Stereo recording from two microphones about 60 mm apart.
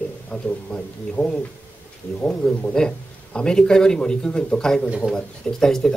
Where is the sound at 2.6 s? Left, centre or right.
Centre.